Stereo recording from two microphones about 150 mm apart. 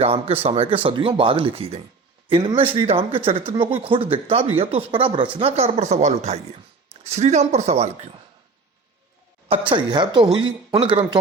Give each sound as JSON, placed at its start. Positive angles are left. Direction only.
{"t": 0.0, "sound": "speech", "side_deg": -40}
{"t": 9.5, "sound": "speech", "side_deg": -35}